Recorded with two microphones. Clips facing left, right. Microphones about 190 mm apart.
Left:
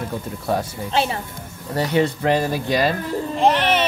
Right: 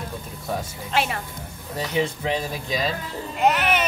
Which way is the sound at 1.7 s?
70° left (ahead or behind).